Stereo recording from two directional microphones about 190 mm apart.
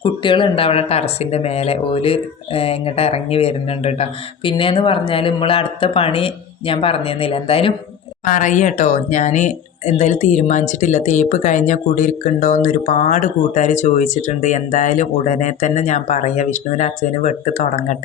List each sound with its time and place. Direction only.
0.0 s speech: 25° left (ahead or behind)
8.2 s speech: 45° left (ahead or behind)